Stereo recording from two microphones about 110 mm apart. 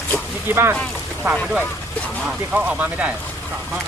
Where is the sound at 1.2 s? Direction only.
10° right (ahead or behind).